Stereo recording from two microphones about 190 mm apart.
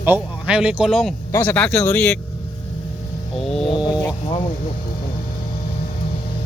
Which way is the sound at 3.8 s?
25° left (ahead or behind).